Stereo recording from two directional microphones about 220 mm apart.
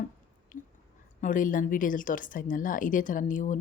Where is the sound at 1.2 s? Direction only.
35° left (ahead or behind).